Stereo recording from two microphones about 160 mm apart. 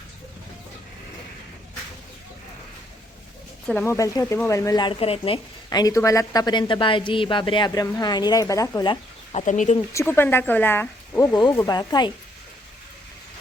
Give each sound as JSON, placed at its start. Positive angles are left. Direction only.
{"t": 3.7, "sound": "speech", "side_deg": 15}
{"t": 5.8, "sound": "speech", "side_deg": 20}
{"t": 9.3, "sound": "speech", "side_deg": 50}
{"t": 9.7, "sound": "speech", "side_deg": 20}
{"t": 11.3, "sound": "speech", "side_deg": 30}